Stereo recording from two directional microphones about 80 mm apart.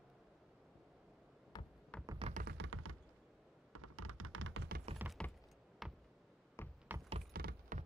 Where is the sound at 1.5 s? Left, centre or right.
Left.